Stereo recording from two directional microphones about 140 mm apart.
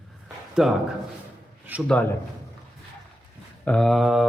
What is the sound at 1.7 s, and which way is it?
Speech, 10° right (ahead or behind).